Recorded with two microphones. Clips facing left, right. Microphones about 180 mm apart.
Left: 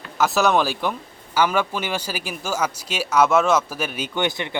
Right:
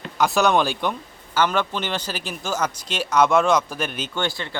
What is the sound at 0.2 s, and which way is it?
Speech, 5° left (ahead or behind).